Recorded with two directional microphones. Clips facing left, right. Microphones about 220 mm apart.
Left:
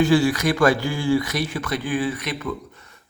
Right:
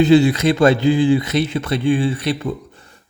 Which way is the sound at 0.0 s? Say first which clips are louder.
Right 5 dB; 20° right (ahead or behind).